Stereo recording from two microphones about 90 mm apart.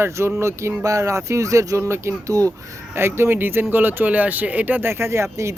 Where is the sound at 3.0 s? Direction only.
25° right (ahead or behind).